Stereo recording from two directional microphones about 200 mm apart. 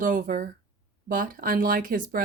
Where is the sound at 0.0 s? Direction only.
40° right (ahead or behind).